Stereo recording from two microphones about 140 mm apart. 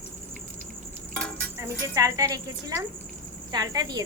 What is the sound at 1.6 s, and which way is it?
A woman's voice, 20° right (ahead or behind).